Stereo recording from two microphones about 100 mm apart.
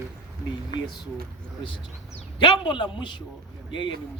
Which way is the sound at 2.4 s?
55° left (ahead or behind).